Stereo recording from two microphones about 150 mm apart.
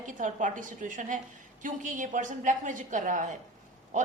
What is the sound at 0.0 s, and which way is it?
A woman's voice, 60° right (ahead or behind).